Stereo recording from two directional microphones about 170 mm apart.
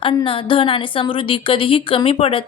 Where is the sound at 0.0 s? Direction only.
30° left (ahead or behind).